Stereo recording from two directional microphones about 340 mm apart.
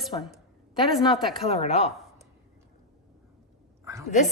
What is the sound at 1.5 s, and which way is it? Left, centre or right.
Speech, centre.